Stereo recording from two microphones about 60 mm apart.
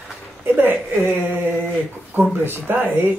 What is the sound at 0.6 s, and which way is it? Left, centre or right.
Speech, right.